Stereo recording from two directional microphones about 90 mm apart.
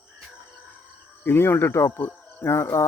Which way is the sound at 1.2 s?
25° left (ahead or behind).